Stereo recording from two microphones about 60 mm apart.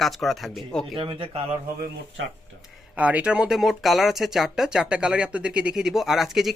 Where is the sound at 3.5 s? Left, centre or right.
Centre.